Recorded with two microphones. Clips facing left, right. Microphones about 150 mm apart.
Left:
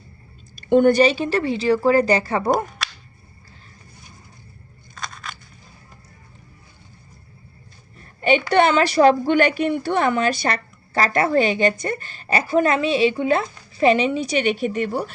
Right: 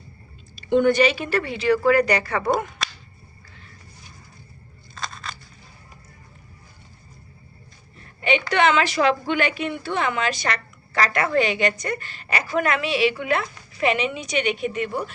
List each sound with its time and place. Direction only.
0.5 s a woman's voice: 45° left (ahead or behind); by 2.5 s 30° left (ahead or behind)
8.2 s a woman's voice: 40° left (ahead or behind)